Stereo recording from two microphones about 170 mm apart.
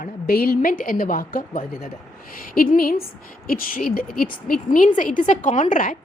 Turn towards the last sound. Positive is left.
turn(degrees=50)  # may be behind; listen again after turning